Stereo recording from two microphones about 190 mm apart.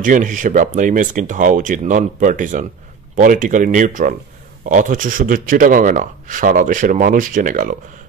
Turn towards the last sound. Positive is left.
turn(degrees=-45)  # may be behind; listen again after turning